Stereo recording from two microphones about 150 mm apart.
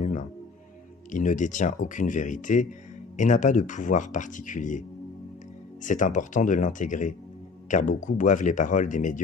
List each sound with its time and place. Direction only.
1.1 s speech: 55° left (ahead or behind)
5.9 s speech: 60° left (ahead or behind)